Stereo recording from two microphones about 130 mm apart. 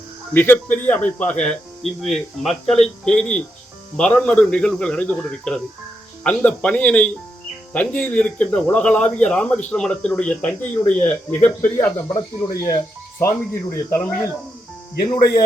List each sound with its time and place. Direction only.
0.3 s speech: 15° left (ahead or behind)
12.1 s speech: 25° left (ahead or behind)
15.0 s speech: 30° left (ahead or behind)